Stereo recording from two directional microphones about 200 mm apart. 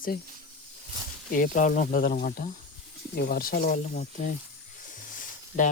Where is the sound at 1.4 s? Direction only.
45° left (ahead or behind).